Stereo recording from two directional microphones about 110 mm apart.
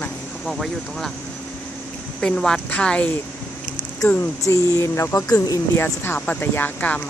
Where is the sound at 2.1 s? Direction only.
10° left (ahead or behind).